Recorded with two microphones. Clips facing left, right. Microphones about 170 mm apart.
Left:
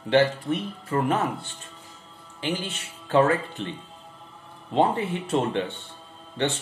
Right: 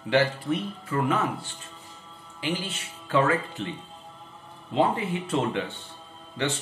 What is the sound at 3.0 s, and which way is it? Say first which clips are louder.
Speech: left 3 dB; 35° left (ahead or behind).